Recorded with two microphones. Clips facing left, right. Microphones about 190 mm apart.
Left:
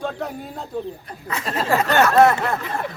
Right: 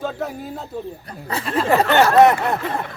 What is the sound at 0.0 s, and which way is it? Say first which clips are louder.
Speech: right 1 dB; centre (ahead or behind).